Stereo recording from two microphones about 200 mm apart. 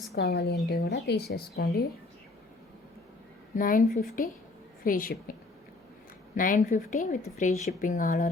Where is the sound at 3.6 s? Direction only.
45° left (ahead or behind).